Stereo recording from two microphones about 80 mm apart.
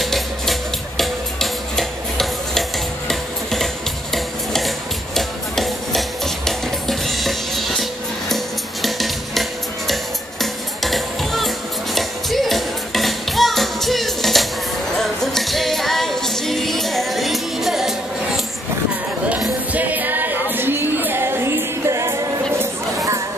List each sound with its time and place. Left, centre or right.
0.0 s music: centre
19.7 s music: right
22.9 s chatter: right